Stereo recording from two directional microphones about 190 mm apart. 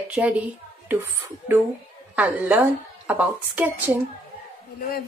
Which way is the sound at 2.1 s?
10° right (ahead or behind).